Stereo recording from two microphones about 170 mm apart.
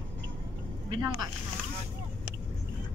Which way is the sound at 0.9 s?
25° right (ahead or behind).